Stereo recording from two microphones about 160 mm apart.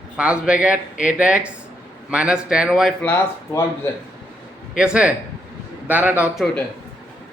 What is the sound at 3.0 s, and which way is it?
Speech, 10° left (ahead or behind).